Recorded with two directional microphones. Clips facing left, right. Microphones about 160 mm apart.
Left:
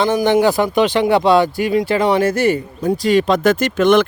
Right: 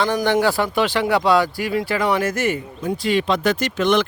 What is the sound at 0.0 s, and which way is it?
Speech, 20° left (ahead or behind).